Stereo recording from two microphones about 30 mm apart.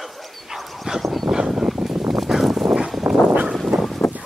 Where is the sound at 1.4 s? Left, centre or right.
Centre.